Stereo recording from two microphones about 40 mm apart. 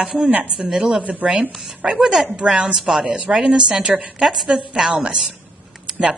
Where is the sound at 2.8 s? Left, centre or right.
Centre.